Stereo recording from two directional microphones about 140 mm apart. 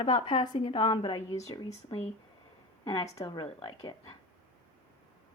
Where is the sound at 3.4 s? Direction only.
40° left (ahead or behind).